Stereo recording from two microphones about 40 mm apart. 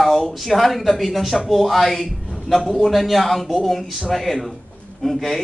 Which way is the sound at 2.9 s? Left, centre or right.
Centre.